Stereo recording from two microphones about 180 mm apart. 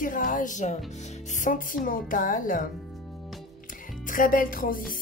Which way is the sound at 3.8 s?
50° left (ahead or behind).